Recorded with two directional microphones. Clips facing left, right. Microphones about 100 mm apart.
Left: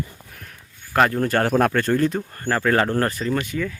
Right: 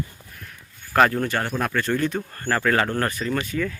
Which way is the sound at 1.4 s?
60° left (ahead or behind).